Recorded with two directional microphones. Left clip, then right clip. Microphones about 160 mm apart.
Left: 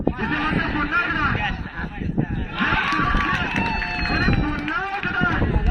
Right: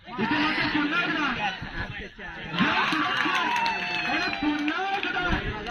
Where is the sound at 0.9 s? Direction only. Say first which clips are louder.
Left 5 dB; 35° right (ahead or behind).